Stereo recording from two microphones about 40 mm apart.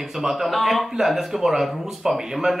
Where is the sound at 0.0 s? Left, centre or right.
Centre.